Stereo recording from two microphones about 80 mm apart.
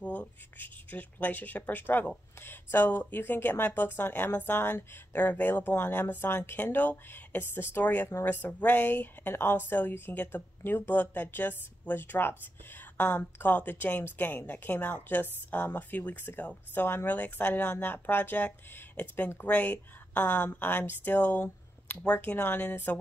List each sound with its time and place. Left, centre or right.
0.0 s a woman's voice: centre